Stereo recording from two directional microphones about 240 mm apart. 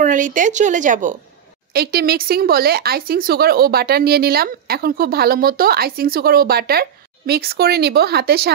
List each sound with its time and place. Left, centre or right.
0.0 s speech: right